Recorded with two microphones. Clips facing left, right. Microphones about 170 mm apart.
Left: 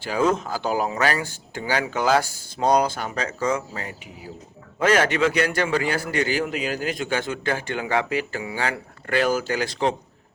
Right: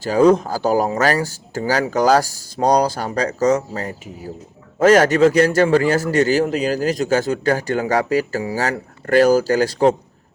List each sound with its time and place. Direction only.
0.0 s a man's voice: 40° right (ahead or behind)